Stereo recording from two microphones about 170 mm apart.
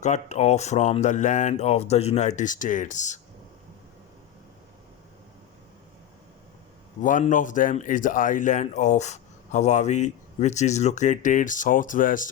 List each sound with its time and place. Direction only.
0.0 s speech: 40° left (ahead or behind)
7.0 s speech: 50° left (ahead or behind)